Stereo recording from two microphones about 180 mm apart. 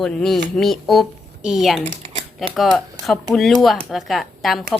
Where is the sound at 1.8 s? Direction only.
40° right (ahead or behind).